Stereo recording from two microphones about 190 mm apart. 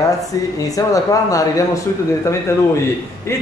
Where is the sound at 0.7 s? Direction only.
15° left (ahead or behind).